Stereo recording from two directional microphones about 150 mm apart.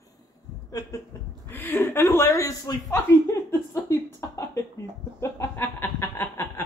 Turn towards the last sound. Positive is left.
turn(degrees=20)  # may be behind; listen again after turning